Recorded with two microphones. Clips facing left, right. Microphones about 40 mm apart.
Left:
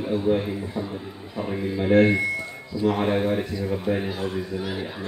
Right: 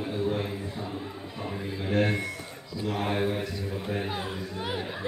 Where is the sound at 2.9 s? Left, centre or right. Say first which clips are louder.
Left 3 dB; centre.